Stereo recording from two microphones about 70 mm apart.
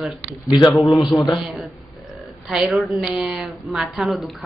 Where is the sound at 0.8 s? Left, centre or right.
Left.